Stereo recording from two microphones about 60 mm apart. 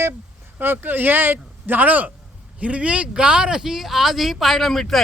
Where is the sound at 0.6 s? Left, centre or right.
Right.